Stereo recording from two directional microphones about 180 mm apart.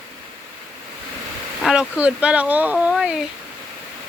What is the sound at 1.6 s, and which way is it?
Speech, 5° right (ahead or behind).